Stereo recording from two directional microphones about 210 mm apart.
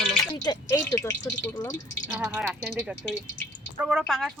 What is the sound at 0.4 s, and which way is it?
Speech, 20° left (ahead or behind).